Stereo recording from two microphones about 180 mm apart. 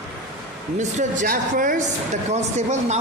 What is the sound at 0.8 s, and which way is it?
A woman's voice, 45° right (ahead or behind).